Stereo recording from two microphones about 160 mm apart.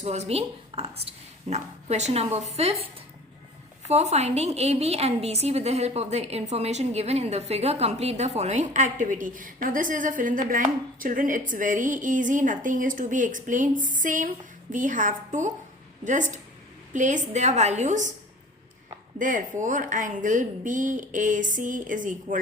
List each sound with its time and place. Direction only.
0.0 s a woman's voice: 45° right (ahead or behind)
3.8 s a woman's voice: 45° right (ahead or behind)
19.2 s a woman's voice: 55° right (ahead or behind)